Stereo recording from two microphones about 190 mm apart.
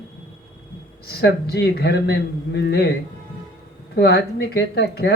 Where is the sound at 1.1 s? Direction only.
55° left (ahead or behind).